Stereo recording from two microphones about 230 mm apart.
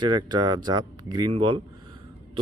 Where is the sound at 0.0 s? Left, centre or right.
Centre.